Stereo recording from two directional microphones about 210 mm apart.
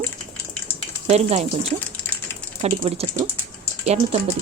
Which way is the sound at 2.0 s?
10° left (ahead or behind).